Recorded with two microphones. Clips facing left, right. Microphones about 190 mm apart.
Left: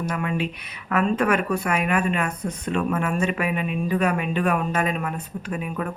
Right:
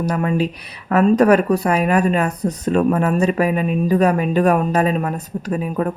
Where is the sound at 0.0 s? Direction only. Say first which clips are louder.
Right 7 dB; 40° right (ahead or behind).